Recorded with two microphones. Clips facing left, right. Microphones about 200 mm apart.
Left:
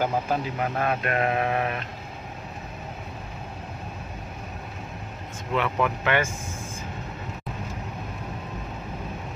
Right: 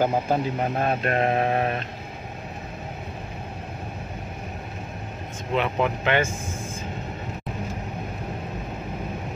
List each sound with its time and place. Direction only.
0.0 s speech: 25° right (ahead or behind)
5.5 s speech: 25° right (ahead or behind)